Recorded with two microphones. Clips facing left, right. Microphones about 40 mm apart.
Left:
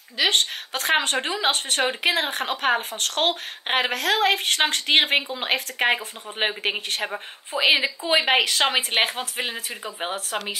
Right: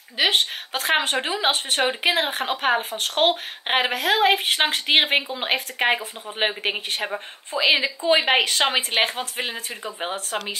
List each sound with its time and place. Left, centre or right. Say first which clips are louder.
0.2 s speech: right 1 dB; centre
3.0 s a woman's voice: right 3 dB; centre